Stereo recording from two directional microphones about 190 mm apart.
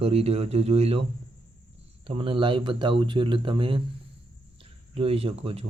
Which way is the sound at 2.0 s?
30° right (ahead or behind).